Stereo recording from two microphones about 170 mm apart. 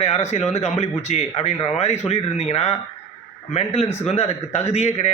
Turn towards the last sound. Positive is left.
turn(degrees=40)  # may be behind; listen again after turning